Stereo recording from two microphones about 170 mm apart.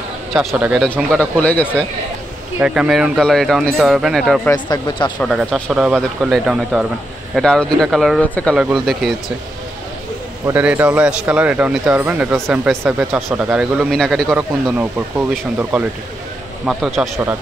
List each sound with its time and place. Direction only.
0.3 s speech: centre (ahead or behind)
1.4 s speech: 10° left (ahead or behind)
2.6 s speech: 5° right (ahead or behind)
4.5 s speech: 25° left (ahead or behind)
5.2 s speech: centre (ahead or behind)
10.4 s speech: 10° right (ahead or behind)
16.6 s speech: centre (ahead or behind)